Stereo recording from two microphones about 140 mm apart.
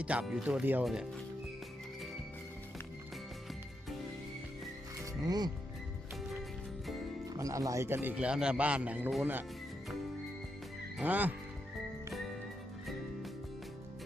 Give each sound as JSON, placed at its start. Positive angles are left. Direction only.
{"t": 0.0, "sound": "speech", "side_deg": -10}
{"t": 5.2, "sound": "speech", "side_deg": -30}
{"t": 7.3, "sound": "speech", "side_deg": -25}
{"t": 10.9, "sound": "speech", "side_deg": -10}
{"t": 12.1, "sound": "music", "side_deg": 0}